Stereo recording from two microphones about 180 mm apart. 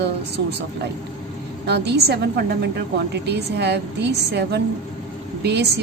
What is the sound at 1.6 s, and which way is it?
A woman's voice, 65° right (ahead or behind).